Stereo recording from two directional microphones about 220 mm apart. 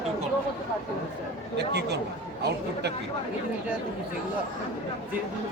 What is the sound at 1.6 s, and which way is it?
Speech, 50° right (ahead or behind).